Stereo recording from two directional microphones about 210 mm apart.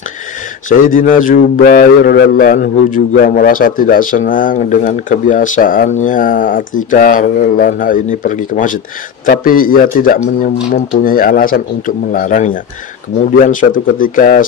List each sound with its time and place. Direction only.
0.7 s speech: 40° left (ahead or behind)